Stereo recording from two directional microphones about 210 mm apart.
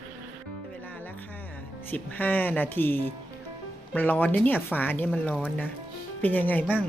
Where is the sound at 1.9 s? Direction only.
10° left (ahead or behind).